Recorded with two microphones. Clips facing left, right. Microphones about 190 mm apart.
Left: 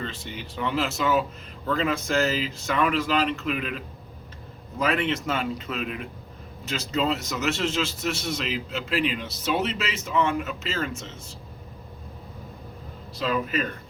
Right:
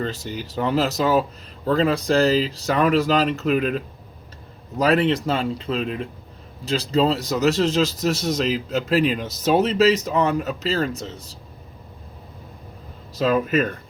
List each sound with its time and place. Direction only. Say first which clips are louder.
0.0 s a man's voice: right 7 dB; 40° right (ahead or behind)
13.1 s speech: right 7 dB; 45° right (ahead or behind)